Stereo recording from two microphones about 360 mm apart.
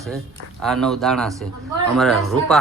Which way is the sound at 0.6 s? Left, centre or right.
Centre.